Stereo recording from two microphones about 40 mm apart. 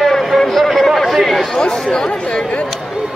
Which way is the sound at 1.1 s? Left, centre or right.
Centre.